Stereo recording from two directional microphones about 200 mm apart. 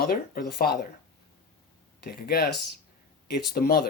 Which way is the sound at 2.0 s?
50° left (ahead or behind).